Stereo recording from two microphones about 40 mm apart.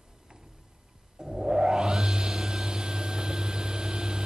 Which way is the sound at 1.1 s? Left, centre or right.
Centre.